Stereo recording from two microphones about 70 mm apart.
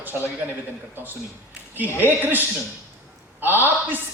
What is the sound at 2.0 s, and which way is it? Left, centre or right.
A man's voice, right.